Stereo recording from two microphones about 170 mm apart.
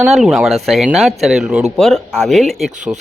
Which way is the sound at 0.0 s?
Centre (ahead or behind).